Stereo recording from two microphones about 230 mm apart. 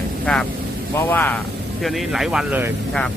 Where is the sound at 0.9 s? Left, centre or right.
Centre.